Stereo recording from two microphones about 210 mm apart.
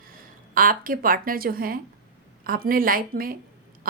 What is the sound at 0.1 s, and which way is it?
A woman's voice, 40° right (ahead or behind).